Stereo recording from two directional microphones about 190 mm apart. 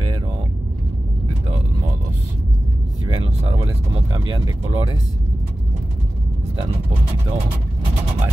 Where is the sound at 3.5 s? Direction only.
30° right (ahead or behind).